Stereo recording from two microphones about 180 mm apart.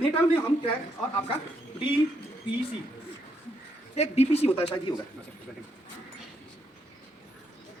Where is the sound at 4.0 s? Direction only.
35° left (ahead or behind).